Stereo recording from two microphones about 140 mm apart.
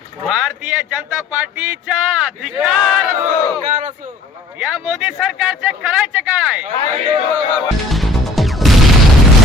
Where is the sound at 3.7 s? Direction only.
65° right (ahead or behind).